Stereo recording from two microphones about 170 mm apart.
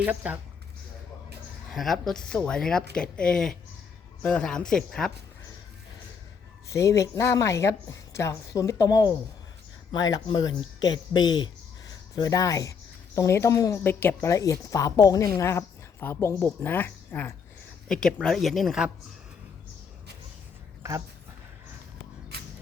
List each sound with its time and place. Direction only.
0.0 s speech: 10° right (ahead or behind)
1.7 s speech: centre (ahead or behind)
6.7 s speech: 15° left (ahead or behind); by 18.9 s centre (ahead or behind)